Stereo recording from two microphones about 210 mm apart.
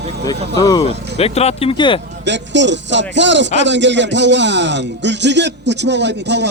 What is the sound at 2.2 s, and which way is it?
Speech, 55° right (ahead or behind).